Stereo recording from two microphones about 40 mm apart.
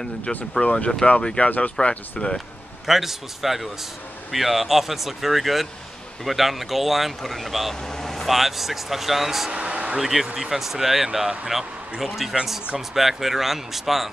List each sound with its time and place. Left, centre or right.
0.6 s speech: left
2.9 s speech: centre
7.8 s vehicle: centre
8.3 s speech: centre
9.5 s a sound: right
9.9 s speech: centre